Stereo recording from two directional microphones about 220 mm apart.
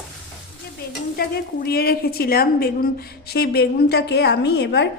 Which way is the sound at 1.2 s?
45° left (ahead or behind).